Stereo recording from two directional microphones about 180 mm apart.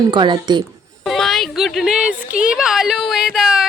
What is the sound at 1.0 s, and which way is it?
Speech, centre (ahead or behind).